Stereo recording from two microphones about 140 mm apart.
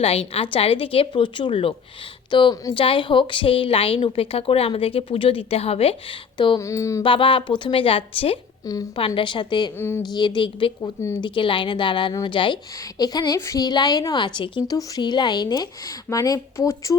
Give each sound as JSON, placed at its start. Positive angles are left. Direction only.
{"t": 0.0, "sound": "a woman's voice", "side_deg": 45}
{"t": 6.3, "sound": "a sound", "side_deg": 35}
{"t": 6.6, "sound": "a woman's voice", "side_deg": 20}
{"t": 7.0, "sound": "a woman's voice", "side_deg": 40}
{"t": 8.6, "sound": "a woman's voice", "side_deg": 25}
{"t": 9.0, "sound": "a woman's voice", "side_deg": 40}
{"t": 9.7, "sound": "a woman's voice", "side_deg": 15}
{"t": 10.1, "sound": "a woman's voice", "side_deg": 35}